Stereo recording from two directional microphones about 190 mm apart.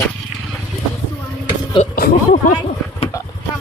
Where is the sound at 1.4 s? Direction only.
30° left (ahead or behind).